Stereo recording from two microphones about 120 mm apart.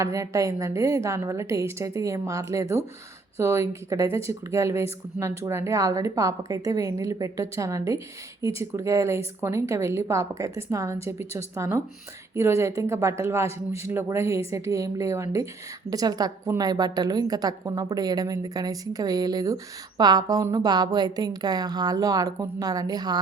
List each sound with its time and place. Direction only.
0.0 s a woman's voice: 25° right (ahead or behind)